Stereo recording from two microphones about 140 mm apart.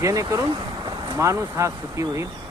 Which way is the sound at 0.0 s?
20° right (ahead or behind).